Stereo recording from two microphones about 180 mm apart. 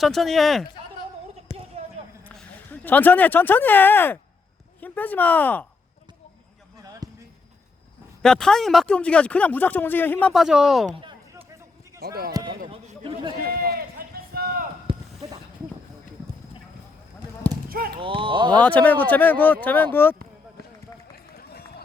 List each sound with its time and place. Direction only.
0.0 s speech: centre (ahead or behind)
1.8 s basketball bounce: 35° right (ahead or behind)
2.2 s speech: 5° left (ahead or behind)
6.8 s basketball bounce: 20° right (ahead or behind)
8.2 s speech: 5° left (ahead or behind)
11.9 s speech: 60° right (ahead or behind)
12.3 s a sound: 20° right (ahead or behind)
13.5 s run: 55° right (ahead or behind)
17.7 s a sound: 55° right (ahead or behind)
18.0 s speech: 30° right (ahead or behind)
18.5 s speech: 10° left (ahead or behind)